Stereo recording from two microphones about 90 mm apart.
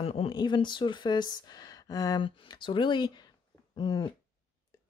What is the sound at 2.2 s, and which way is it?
Speech, 70° left (ahead or behind).